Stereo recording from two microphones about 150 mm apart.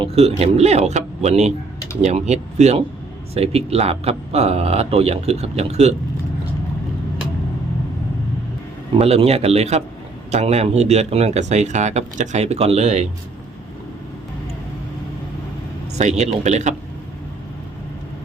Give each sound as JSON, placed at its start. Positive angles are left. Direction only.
{"t": 0.0, "sound": "speech", "side_deg": -40}
{"t": 9.0, "sound": "speech", "side_deg": -45}
{"t": 16.0, "sound": "speech", "side_deg": -50}